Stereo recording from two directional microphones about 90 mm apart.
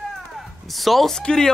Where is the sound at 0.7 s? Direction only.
Centre (ahead or behind).